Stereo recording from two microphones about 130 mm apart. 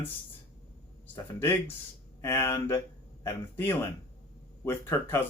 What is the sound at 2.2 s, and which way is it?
Speech, 20° left (ahead or behind).